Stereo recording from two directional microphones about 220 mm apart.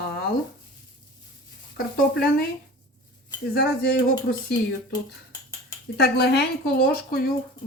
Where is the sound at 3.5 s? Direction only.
45° left (ahead or behind).